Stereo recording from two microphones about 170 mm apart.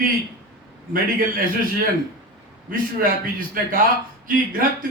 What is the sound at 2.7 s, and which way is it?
Speech, 55° right (ahead or behind).